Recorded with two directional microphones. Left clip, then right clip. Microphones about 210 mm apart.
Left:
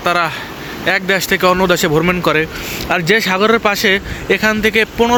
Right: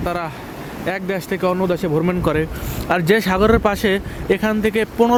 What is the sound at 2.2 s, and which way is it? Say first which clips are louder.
Speech: left 5 dB; 15° right (ahead or behind).